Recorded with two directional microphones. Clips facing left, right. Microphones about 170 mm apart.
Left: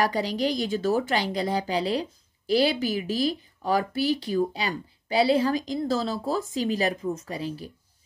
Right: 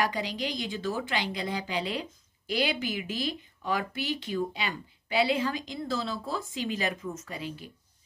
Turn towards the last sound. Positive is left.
turn(degrees=35)  # may be behind; listen again after turning